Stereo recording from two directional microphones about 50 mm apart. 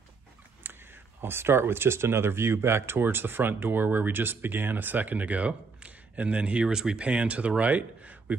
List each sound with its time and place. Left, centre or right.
0.7 s a sound: right
1.2 s speech: right
6.7 s speech: centre
7.0 s speech: right